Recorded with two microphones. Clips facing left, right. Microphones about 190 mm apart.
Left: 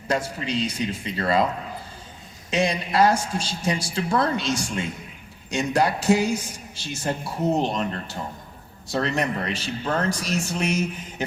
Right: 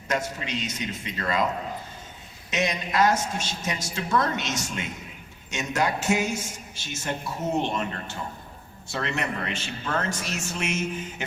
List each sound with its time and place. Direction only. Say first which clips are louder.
0.1 s a man's voice: left 3 dB; 35° left (ahead or behind)
2.5 s a man's voice: left 4 dB; 30° left (ahead or behind)